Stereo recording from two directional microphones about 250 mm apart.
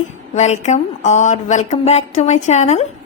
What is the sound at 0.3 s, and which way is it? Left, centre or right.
A woman's voice, left.